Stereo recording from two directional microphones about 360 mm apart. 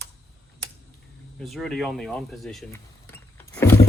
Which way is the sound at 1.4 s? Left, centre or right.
Centre.